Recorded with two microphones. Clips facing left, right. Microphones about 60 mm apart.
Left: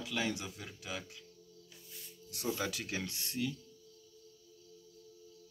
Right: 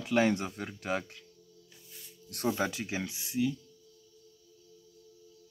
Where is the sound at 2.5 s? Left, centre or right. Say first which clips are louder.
Right 4 dB; right; by 3.5 s centre.